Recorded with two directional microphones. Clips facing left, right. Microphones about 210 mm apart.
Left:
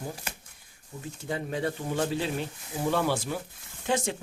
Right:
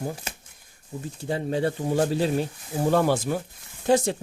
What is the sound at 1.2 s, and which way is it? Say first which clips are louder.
Speech: right 5 dB; 30° right (ahead or behind).